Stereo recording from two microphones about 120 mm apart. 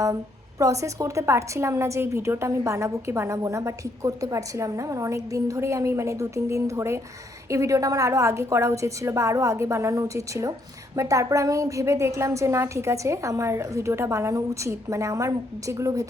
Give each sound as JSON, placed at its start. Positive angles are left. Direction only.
{"t": 0.6, "sound": "a woman's voice", "side_deg": -25}